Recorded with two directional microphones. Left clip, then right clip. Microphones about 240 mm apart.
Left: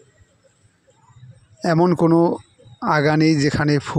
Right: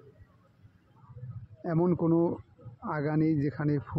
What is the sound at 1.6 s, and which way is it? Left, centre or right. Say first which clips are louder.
Speech: left 12 dB; left.